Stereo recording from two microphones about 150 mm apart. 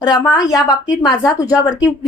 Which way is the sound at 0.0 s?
25° left (ahead or behind).